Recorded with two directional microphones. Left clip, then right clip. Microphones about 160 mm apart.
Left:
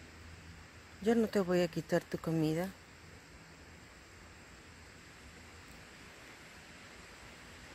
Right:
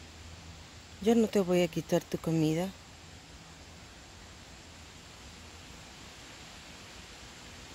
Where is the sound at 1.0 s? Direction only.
20° right (ahead or behind).